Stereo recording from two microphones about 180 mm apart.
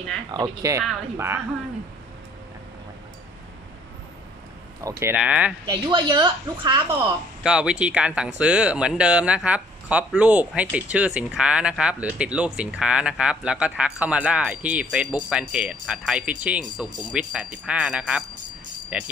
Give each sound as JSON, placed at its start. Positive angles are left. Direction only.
{"t": 0.3, "sound": "speech", "side_deg": -20}
{"t": 5.0, "sound": "speech", "side_deg": -5}
{"t": 5.7, "sound": "a woman's voice", "side_deg": -25}
{"t": 7.4, "sound": "a man's voice", "side_deg": -5}